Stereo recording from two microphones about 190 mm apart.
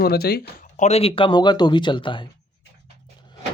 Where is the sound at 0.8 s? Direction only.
30° left (ahead or behind).